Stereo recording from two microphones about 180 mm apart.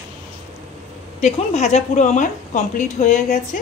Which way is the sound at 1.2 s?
40° left (ahead or behind).